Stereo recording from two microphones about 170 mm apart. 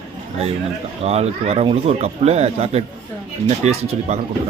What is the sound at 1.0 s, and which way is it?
Speech, 40° right (ahead or behind).